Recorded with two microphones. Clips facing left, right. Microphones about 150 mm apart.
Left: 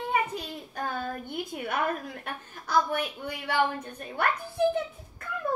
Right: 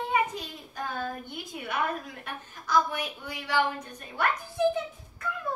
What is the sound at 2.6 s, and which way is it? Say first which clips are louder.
A woman's voice: even; 55° left (ahead or behind).